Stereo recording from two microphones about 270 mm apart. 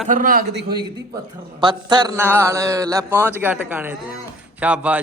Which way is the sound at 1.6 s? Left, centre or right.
Centre.